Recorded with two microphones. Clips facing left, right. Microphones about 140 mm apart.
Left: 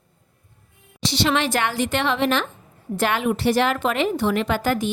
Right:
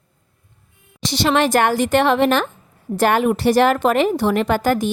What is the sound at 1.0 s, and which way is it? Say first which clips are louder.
A woman's voice: right 4 dB; 45° right (ahead or behind).